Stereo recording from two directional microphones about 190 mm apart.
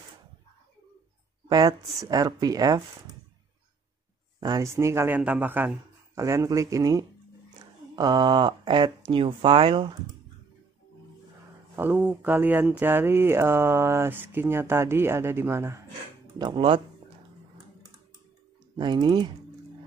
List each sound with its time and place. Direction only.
1.5 s speech: 20° right (ahead or behind)
4.4 s speech: 20° right (ahead or behind)
11.7 s speech: 10° right (ahead or behind)
16.3 s speech: 25° right (ahead or behind)
18.8 s speech: 25° right (ahead or behind)